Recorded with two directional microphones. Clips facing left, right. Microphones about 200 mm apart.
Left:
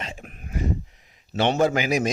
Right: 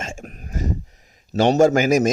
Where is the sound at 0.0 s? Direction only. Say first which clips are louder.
Right 4 dB; 45° right (ahead or behind).